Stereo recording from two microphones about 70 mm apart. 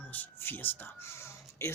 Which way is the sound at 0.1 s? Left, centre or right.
Left.